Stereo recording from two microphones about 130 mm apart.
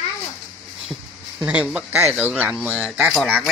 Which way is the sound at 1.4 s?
10° right (ahead or behind).